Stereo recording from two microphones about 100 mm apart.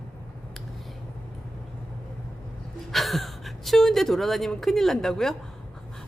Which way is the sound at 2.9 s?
Centre (ahead or behind).